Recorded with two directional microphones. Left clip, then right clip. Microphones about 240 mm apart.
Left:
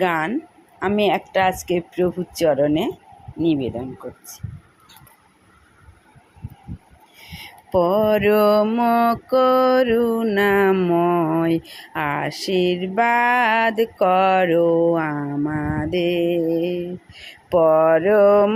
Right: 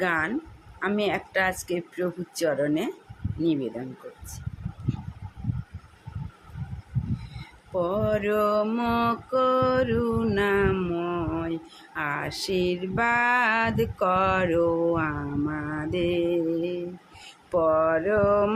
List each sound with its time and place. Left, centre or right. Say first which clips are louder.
0.0 s mantra: left 5 dB; left
7.7 s mantra: left 9 dB; left
11.9 s a sound: left 6 dB; left